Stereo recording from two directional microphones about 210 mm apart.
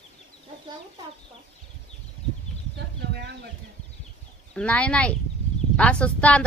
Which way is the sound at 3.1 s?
50° right (ahead or behind).